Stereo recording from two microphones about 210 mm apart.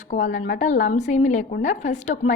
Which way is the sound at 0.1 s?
40° left (ahead or behind).